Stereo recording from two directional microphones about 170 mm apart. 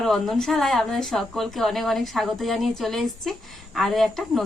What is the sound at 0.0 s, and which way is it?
Speech, centre (ahead or behind).